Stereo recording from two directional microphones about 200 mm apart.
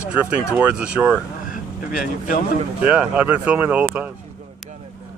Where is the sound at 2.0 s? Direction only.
45° left (ahead or behind).